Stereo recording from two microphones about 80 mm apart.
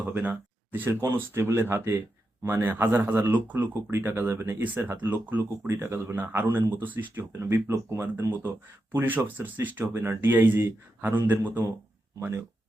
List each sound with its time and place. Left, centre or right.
0.1 s speech: right
0.9 s speech: right
5.4 s speech: right
6.1 s speech: right